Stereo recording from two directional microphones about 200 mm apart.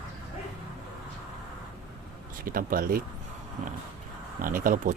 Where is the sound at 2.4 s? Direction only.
45° right (ahead or behind).